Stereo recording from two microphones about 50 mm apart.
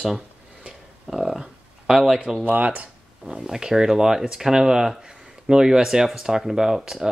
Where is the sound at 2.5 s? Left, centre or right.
Right.